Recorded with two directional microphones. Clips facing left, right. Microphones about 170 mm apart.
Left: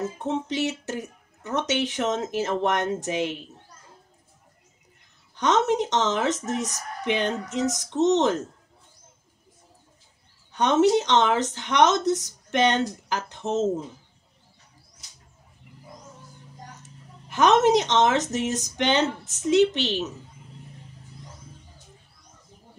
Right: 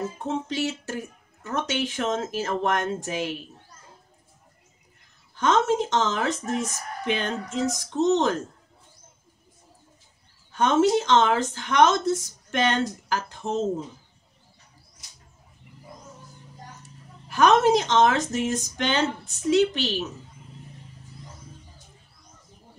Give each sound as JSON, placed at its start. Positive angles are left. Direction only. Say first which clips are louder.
{"t": 0.2, "sound": "speech", "louder": "left 1 dB", "side_deg": 20}
{"t": 5.3, "sound": "speech", "louder": "even", "side_deg": 20}
{"t": 10.5, "sound": "speech", "louder": "left 1 dB", "side_deg": 20}
{"t": 17.3, "sound": "speech", "louder": "even", "side_deg": 20}